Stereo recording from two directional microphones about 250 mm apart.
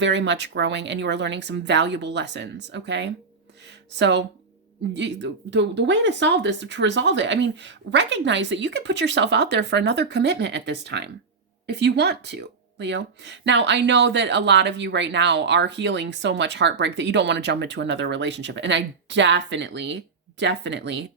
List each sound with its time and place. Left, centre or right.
0.0 s speech: right